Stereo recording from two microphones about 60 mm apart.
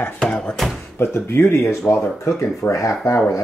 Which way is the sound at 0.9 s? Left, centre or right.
Left.